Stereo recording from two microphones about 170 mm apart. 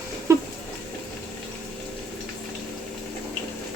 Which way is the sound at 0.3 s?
15° right (ahead or behind).